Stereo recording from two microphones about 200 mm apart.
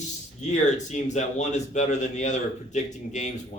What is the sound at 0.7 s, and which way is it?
A man's voice, 35° left (ahead or behind).